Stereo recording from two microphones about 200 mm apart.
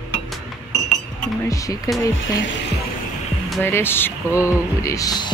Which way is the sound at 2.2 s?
70° left (ahead or behind).